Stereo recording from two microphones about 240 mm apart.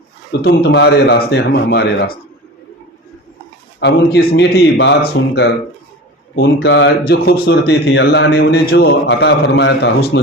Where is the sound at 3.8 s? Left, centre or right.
Left.